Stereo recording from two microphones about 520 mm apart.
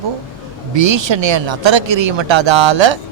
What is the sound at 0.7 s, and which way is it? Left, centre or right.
A man's voice, right.